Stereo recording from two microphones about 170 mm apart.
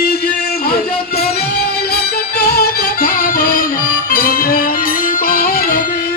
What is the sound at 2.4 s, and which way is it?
Music, 65° left (ahead or behind).